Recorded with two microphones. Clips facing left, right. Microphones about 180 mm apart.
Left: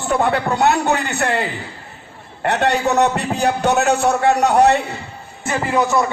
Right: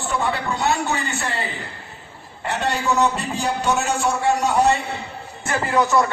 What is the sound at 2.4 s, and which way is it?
A man's voice, 65° left (ahead or behind).